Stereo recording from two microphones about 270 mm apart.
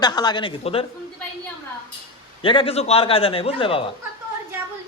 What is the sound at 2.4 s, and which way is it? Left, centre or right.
A man's voice, centre.